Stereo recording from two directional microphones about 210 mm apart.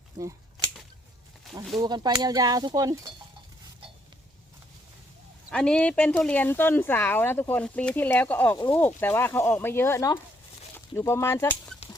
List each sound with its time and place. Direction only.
1.5 s a sound: centre (ahead or behind)
1.8 s speech: 20° right (ahead or behind)
5.5 s speech: 5° left (ahead or behind)